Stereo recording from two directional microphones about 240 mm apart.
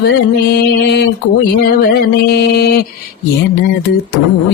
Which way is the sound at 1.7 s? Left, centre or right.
Left.